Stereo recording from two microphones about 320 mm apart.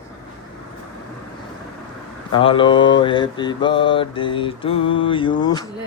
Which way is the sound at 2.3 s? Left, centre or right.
Centre.